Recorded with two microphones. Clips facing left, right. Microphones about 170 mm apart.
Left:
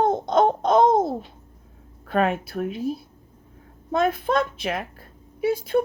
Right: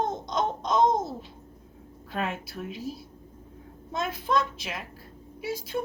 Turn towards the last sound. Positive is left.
turn(degrees=55)  # may be behind; listen again after turning